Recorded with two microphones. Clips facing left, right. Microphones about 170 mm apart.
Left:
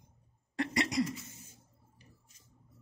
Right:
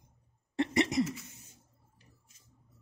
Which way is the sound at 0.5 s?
20° right (ahead or behind).